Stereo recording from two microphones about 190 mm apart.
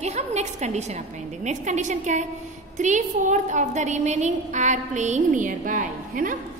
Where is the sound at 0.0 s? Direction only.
35° right (ahead or behind).